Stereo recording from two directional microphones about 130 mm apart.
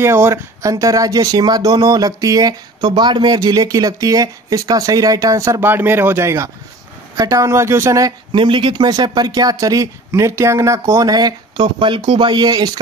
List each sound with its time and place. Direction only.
0.0 s speech: 20° right (ahead or behind)
8.3 s speech: 40° right (ahead or behind)